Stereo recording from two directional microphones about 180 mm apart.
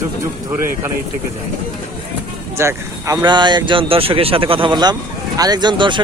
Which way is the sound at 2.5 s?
15° right (ahead or behind).